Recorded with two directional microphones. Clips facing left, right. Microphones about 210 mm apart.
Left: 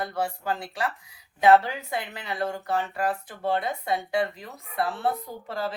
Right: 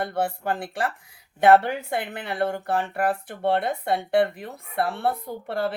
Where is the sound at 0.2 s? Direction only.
55° right (ahead or behind).